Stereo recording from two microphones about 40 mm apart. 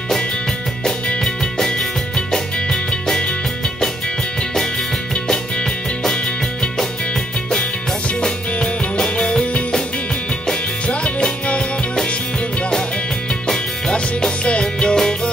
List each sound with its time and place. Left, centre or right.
1.2 s music: centre
2.5 s music: left
4.4 s music: centre
8.2 s music: left
13.3 s music: centre